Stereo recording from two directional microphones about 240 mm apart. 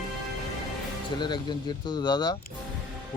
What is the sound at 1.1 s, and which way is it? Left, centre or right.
Speech, centre.